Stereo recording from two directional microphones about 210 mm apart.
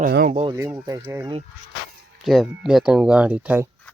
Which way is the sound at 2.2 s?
Centre (ahead or behind).